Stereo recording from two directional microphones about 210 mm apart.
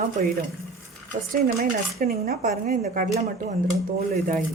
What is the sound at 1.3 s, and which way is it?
Speech, 45° right (ahead or behind).